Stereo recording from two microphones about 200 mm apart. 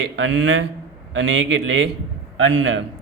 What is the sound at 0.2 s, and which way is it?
A man's voice, 70° right (ahead or behind).